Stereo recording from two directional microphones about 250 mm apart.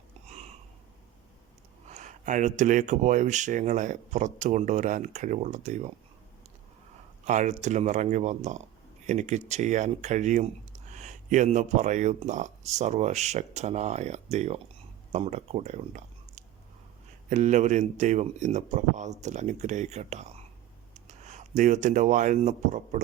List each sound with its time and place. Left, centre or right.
0.3 s a sound: right
1.9 s speech: right
7.3 s speech: right